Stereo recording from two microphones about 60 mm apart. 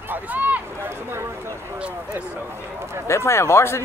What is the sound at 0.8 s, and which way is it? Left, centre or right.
Speech, right.